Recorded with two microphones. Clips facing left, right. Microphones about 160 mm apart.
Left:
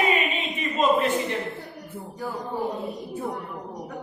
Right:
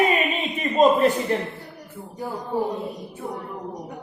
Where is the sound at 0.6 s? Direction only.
40° right (ahead or behind).